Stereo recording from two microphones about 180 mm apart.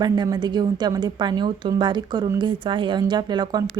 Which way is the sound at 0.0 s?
25° right (ahead or behind).